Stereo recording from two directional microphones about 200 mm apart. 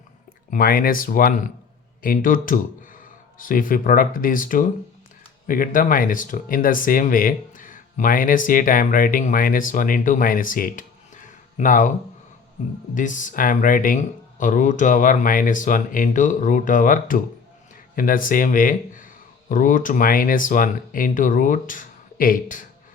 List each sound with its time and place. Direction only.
0.5 s speech: 45° left (ahead or behind)
12.9 s speech: 40° left (ahead or behind)